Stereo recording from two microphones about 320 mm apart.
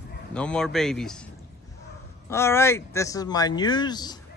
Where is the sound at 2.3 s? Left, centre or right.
Centre.